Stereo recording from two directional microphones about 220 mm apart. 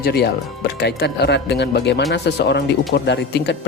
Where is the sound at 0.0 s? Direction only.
45° left (ahead or behind).